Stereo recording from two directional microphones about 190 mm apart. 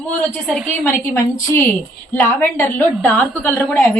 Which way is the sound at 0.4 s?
10° left (ahead or behind).